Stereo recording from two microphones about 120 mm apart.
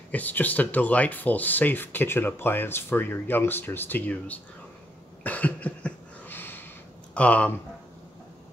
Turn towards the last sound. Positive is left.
turn(degrees=10)  # may be behind; listen again after turning